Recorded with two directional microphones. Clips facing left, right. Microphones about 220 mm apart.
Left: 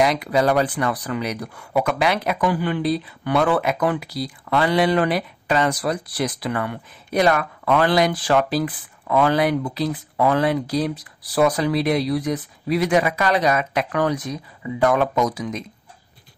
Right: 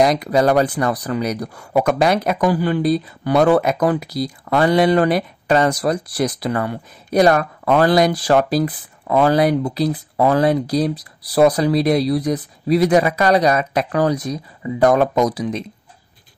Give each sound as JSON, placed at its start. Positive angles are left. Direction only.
{"t": 0.0, "sound": "speech", "side_deg": -40}